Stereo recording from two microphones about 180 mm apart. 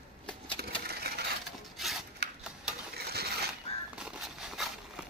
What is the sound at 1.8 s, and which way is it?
Filing, centre (ahead or behind).